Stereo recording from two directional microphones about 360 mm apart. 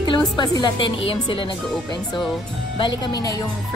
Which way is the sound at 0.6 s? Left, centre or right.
Centre.